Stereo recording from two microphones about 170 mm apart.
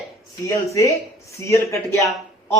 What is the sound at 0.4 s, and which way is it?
A man's voice, 20° left (ahead or behind).